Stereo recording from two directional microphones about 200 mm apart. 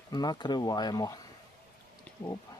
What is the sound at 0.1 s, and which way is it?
Speech, 20° left (ahead or behind).